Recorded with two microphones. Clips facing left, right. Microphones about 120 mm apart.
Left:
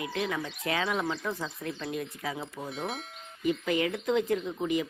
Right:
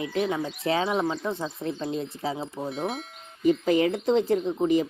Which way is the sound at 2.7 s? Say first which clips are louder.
Right 4 dB; centre (ahead or behind).